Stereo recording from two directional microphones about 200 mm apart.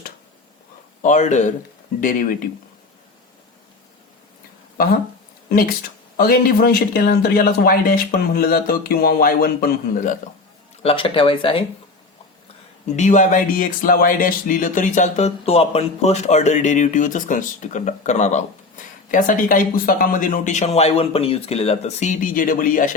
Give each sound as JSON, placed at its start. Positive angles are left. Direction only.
{"t": 1.0, "sound": "speech", "side_deg": 35}
{"t": 5.5, "sound": "speech", "side_deg": 50}
{"t": 10.8, "sound": "speech", "side_deg": 25}
{"t": 13.0, "sound": "speech", "side_deg": 40}